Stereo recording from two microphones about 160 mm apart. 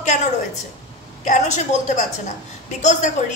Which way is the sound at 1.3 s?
50° left (ahead or behind).